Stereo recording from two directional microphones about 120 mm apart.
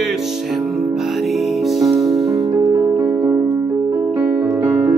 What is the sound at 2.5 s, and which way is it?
Music, 35° right (ahead or behind).